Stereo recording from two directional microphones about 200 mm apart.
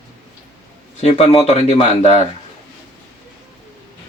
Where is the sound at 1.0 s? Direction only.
35° left (ahead or behind).